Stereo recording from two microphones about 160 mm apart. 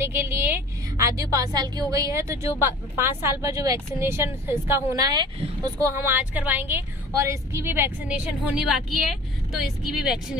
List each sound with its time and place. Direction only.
0.1 s a woman's voice: 10° right (ahead or behind)